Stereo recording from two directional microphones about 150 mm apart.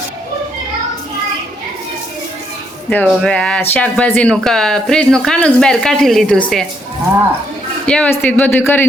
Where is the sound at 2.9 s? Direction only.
10° left (ahead or behind).